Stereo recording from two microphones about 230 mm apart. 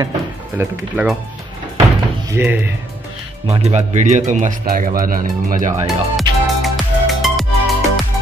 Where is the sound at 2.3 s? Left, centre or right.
Centre.